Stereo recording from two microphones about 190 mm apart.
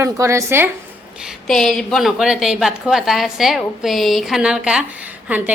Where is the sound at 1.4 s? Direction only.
5° left (ahead or behind).